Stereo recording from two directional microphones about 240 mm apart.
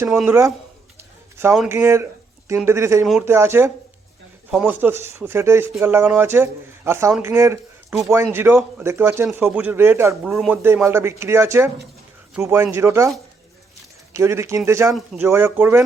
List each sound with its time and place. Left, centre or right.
0.0 s speech: centre
14.9 s speech: centre